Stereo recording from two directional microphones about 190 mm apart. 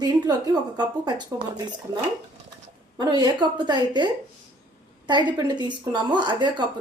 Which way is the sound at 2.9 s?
20° right (ahead or behind).